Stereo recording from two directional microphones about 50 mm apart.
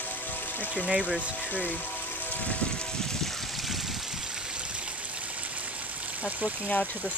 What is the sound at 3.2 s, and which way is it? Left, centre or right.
Water, centre.